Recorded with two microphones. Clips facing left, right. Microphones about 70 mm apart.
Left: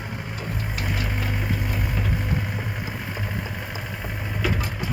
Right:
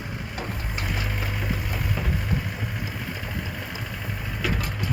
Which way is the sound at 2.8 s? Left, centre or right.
Left.